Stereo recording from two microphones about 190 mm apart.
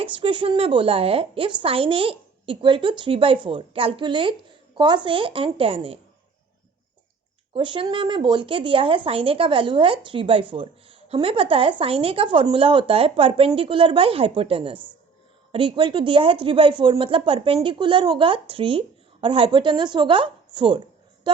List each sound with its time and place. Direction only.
0.0 s speech: 25° right (ahead or behind)
7.5 s speech: 25° right (ahead or behind)